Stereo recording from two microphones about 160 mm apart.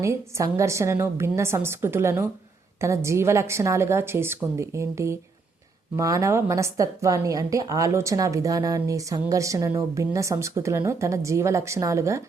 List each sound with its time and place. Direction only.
0.0 s a woman's voice: 20° right (ahead or behind)